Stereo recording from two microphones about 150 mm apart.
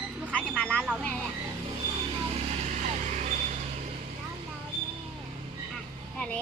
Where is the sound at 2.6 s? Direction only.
50° right (ahead or behind).